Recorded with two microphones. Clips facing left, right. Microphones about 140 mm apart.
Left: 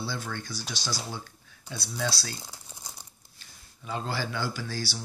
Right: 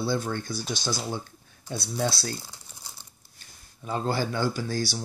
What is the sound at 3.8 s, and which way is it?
Speech, 40° right (ahead or behind).